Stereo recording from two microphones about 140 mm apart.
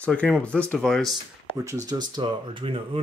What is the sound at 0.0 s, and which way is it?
Speech, 10° left (ahead or behind).